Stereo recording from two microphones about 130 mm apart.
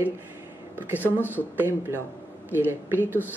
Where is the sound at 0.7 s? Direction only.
15° right (ahead or behind).